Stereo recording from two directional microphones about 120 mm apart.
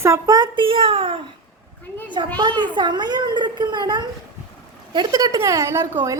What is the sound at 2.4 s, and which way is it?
A woman's voice, 40° right (ahead or behind).